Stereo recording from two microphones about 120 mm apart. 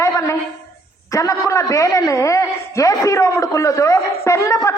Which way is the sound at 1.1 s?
25° left (ahead or behind).